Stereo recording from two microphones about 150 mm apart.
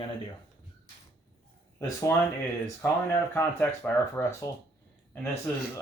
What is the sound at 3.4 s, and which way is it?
Speech, 15° left (ahead or behind).